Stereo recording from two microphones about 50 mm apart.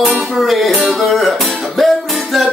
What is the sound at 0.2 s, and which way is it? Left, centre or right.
Music, centre.